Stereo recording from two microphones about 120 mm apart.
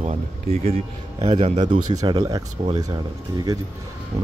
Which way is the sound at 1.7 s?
35° right (ahead or behind).